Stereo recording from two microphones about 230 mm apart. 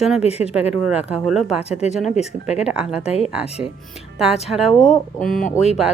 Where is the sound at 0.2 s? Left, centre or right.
Left.